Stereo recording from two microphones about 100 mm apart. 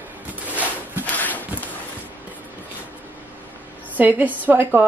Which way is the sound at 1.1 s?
15° left (ahead or behind).